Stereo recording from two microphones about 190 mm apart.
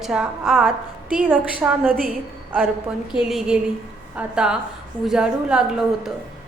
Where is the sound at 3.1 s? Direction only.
Centre (ahead or behind).